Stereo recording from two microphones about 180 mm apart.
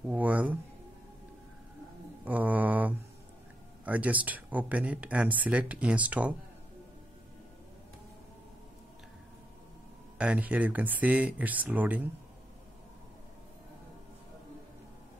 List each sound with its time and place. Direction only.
0.0 s speech: 10° right (ahead or behind)
2.2 s mantra: 10° right (ahead or behind)
3.8 s speech: 10° right (ahead or behind)
10.1 s speech: 5° right (ahead or behind)